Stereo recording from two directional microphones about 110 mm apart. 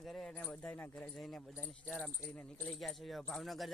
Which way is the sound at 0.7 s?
20° left (ahead or behind).